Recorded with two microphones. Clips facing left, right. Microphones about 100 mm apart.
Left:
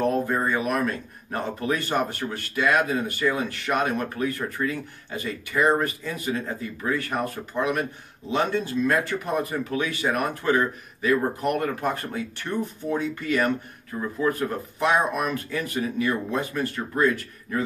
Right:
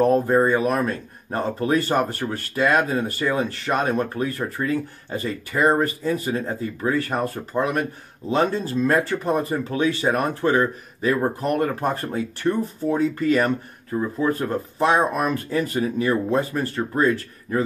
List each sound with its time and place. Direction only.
0.0 s speech: 35° right (ahead or behind)
8.3 s speech: 35° right (ahead or behind)